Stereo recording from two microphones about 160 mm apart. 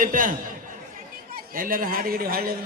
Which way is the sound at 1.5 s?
60° right (ahead or behind).